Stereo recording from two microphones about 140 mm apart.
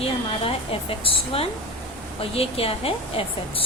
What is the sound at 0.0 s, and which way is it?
A woman's voice, 40° left (ahead or behind).